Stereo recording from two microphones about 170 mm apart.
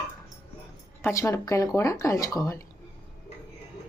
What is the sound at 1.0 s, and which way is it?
Speech, 15° left (ahead or behind).